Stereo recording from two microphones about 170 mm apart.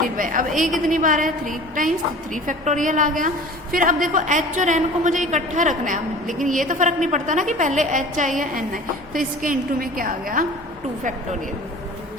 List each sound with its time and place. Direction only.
0.0 s a woman's voice: 50° right (ahead or behind)